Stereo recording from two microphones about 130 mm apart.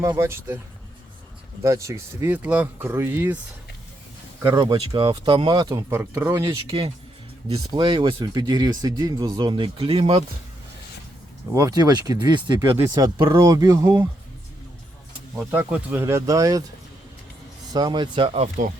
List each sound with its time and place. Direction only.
0.0 s speech: 20° right (ahead or behind)
1.6 s speech: 25° right (ahead or behind)
4.5 s speech: 35° right (ahead or behind)
5.9 s speech: 20° right (ahead or behind)
7.6 s speech: 35° right (ahead or behind)
11.5 s speech: 30° right (ahead or behind)
12.7 s speech: 25° right (ahead or behind)
15.4 s speech: 15° right (ahead or behind)
17.7 s speech: 35° right (ahead or behind)
18.4 s speech: 70° right (ahead or behind)